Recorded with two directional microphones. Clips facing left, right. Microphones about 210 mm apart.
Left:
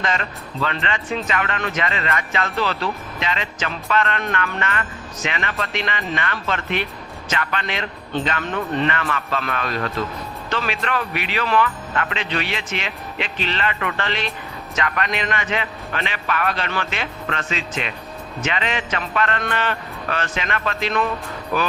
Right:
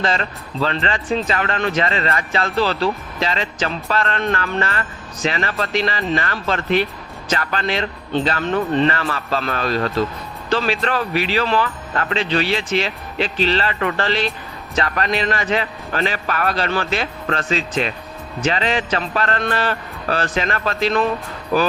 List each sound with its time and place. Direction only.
0.0 s speech: 35° right (ahead or behind)